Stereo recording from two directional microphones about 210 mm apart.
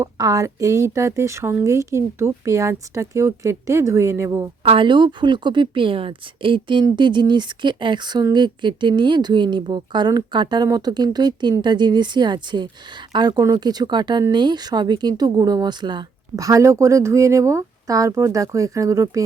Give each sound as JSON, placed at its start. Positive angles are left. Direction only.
{"t": 0.0, "sound": "speech", "side_deg": -15}
{"t": 4.6, "sound": "a woman's voice", "side_deg": -25}